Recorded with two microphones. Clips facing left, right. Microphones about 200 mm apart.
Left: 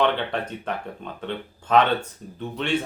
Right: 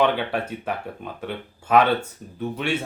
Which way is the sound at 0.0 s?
10° right (ahead or behind).